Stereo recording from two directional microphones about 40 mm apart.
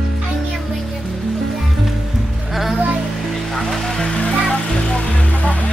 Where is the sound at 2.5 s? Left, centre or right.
Centre.